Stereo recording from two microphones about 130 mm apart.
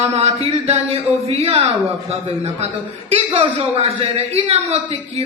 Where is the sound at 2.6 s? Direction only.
50° right (ahead or behind).